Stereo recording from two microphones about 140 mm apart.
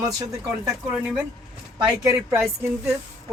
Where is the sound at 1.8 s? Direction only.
25° right (ahead or behind).